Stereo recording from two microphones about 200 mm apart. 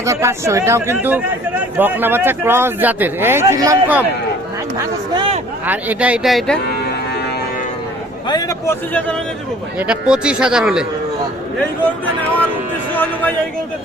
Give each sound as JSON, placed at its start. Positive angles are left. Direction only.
{"t": 0.0, "sound": "speech", "side_deg": -15}
{"t": 5.1, "sound": "a sound", "side_deg": -25}
{"t": 5.6, "sound": "speech", "side_deg": -10}
{"t": 8.3, "sound": "a man's voice", "side_deg": 20}
{"t": 9.7, "sound": "speech", "side_deg": -5}
{"t": 12.9, "sound": "a man's voice", "side_deg": 10}